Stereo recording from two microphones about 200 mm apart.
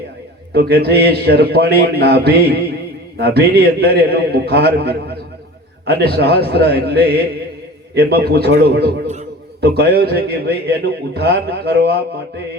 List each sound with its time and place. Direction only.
0.5 s a man's voice: 55° right (ahead or behind)
9.6 s a man's voice: 55° right (ahead or behind)